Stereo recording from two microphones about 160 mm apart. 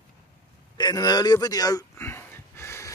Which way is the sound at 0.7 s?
25° left (ahead or behind).